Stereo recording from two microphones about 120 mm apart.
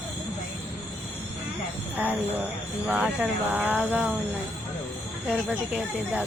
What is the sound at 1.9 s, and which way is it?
Speech, 15° right (ahead or behind).